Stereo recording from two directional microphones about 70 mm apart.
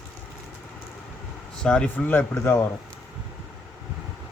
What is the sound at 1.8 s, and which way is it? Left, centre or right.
Speech, left.